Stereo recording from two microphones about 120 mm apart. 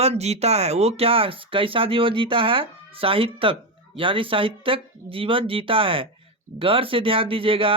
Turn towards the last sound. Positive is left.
turn(degrees=-50)  # may be behind; listen again after turning